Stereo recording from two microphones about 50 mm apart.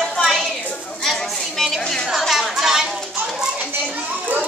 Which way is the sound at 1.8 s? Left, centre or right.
Centre.